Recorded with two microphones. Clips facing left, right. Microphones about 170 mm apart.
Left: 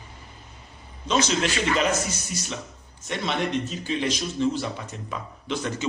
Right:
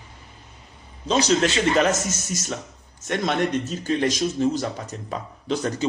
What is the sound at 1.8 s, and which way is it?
Speech, 45° right (ahead or behind).